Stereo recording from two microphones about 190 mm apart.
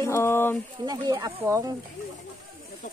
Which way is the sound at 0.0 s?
15° left (ahead or behind).